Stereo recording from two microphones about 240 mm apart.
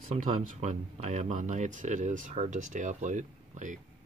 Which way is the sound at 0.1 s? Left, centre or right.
Right.